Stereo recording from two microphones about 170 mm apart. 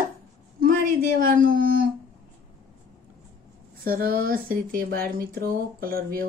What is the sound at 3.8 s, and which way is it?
Speech, 60° right (ahead or behind).